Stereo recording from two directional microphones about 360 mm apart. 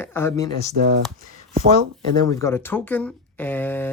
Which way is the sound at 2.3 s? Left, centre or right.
Centre.